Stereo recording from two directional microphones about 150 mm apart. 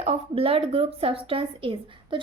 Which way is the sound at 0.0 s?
40° right (ahead or behind).